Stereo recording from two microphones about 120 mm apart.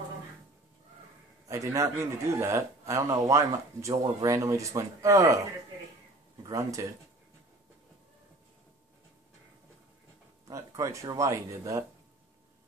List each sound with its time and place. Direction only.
1.5 s a man's voice: 25° right (ahead or behind)
6.4 s speech: 25° right (ahead or behind)
10.5 s a man's voice: 25° right (ahead or behind)